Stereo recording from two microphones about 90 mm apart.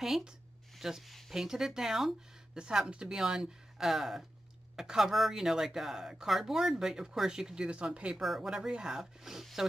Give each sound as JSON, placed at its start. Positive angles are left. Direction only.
{"t": 0.0, "sound": "speech", "side_deg": -5}